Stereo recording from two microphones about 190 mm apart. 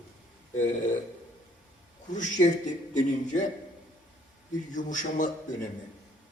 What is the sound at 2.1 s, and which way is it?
A man's voice, 40° left (ahead or behind).